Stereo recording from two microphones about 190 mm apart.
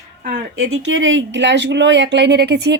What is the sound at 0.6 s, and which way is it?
A woman's voice, 90° right.